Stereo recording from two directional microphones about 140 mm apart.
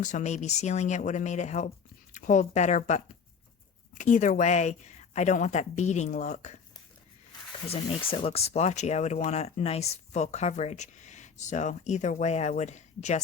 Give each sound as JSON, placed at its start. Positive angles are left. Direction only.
{"t": 0.0, "sound": "speech", "side_deg": 60}
{"t": 7.7, "sound": "speech", "side_deg": 40}